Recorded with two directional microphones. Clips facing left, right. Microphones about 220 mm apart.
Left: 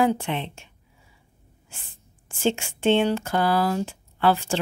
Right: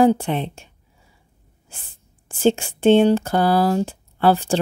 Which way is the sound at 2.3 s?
35° right (ahead or behind).